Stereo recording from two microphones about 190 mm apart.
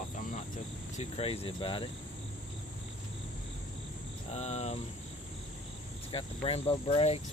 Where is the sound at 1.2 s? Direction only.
30° left (ahead or behind).